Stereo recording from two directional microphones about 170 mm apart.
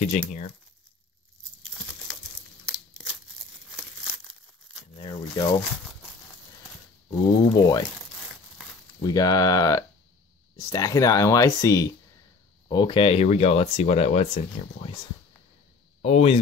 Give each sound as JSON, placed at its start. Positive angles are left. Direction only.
{"t": 3.7, "sound": "crumpling", "side_deg": 0}
{"t": 4.9, "sound": "crumpling", "side_deg": 25}
{"t": 7.1, "sound": "speech", "side_deg": 25}
{"t": 9.0, "sound": "speech", "side_deg": 20}
{"t": 16.0, "sound": "speech", "side_deg": 40}